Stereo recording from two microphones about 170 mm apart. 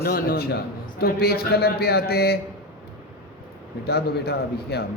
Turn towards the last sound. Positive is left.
turn(degrees=70)  # may be behind; listen again after turning